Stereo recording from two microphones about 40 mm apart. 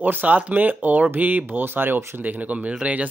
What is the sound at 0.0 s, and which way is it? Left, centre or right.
Speech, right.